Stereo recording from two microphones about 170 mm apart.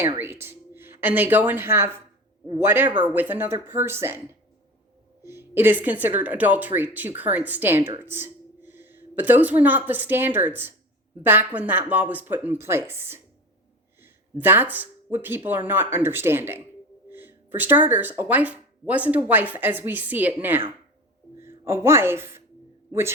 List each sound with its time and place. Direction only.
0.0 s speech: 15° right (ahead or behind)
5.2 s a man's voice: 15° right (ahead or behind)